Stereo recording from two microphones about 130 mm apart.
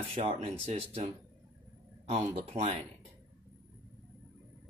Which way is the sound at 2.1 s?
60° right (ahead or behind).